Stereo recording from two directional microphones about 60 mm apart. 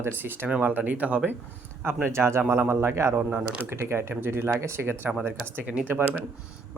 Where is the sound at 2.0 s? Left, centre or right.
Right.